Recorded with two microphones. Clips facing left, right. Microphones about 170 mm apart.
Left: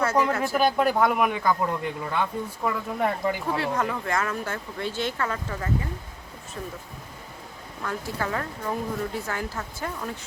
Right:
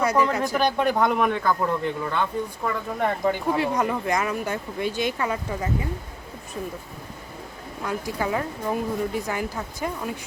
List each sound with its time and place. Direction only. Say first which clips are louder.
0.0 s speech: right 2 dB; 15° right (ahead or behind)
0.5 s speech: left 3 dB; centre (ahead or behind)
2.6 s speech: left 1 dB; centre (ahead or behind)
3.5 s speech: right 3 dB; 15° right (ahead or behind)
7.8 s speech: right 3 dB; 15° right (ahead or behind)